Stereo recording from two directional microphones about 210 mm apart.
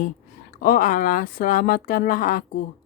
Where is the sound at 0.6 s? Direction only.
40° left (ahead or behind).